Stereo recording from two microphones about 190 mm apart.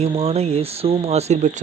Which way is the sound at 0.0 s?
35° right (ahead or behind).